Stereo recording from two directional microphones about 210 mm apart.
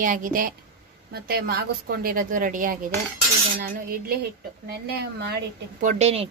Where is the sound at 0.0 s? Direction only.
40° right (ahead or behind).